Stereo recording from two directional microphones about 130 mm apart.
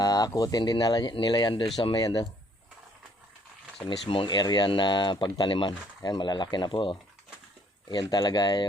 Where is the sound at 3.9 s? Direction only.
40° left (ahead or behind).